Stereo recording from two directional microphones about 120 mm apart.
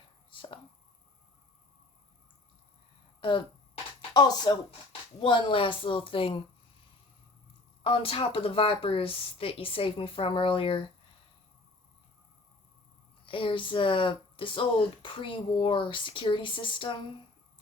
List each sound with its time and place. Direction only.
3.2 s a sound: 45° left (ahead or behind)
4.1 s speech: 35° left (ahead or behind)
7.9 s speech: 50° left (ahead or behind)
13.2 s speech: 45° left (ahead or behind)